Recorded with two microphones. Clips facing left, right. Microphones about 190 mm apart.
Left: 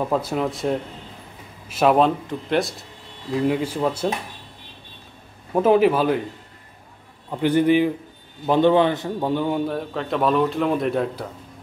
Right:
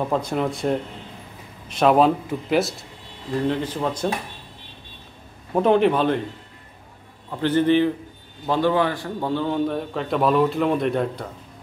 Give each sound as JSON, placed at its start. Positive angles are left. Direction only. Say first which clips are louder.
{"t": 0.1, "sound": "speech", "louder": "even", "side_deg": 5}
{"t": 3.3, "sound": "speech", "louder": "left 2 dB", "side_deg": 10}
{"t": 5.5, "sound": "speech", "louder": "left 1 dB", "side_deg": 5}
{"t": 7.2, "sound": "speech", "louder": "left 1 dB", "side_deg": 10}
{"t": 8.5, "sound": "a man's voice", "louder": "left 4 dB", "side_deg": 20}
{"t": 9.7, "sound": "speech", "louder": "right 1 dB", "side_deg": 0}